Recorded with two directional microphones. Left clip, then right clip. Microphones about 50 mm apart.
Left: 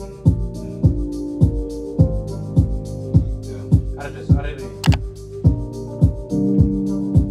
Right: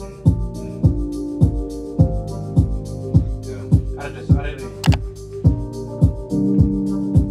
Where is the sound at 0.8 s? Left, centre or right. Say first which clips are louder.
Even; left.